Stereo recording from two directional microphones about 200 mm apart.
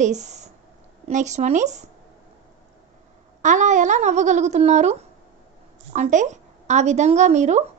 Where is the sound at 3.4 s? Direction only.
40° right (ahead or behind).